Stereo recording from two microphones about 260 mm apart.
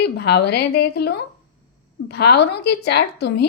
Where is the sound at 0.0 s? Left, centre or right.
Left.